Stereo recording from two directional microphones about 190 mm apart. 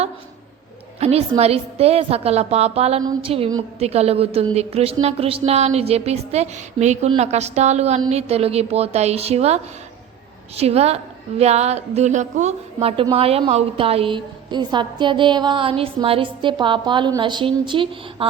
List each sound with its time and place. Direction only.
0.9 s a woman's voice: 35° right (ahead or behind)